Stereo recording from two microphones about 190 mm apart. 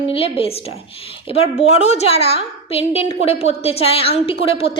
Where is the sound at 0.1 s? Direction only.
30° left (ahead or behind).